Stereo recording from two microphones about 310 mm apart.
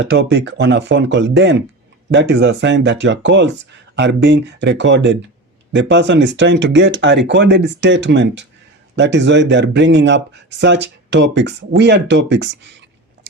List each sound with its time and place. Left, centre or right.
0.0 s speech: right